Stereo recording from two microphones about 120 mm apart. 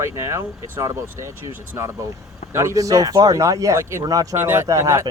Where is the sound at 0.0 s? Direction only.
25° right (ahead or behind).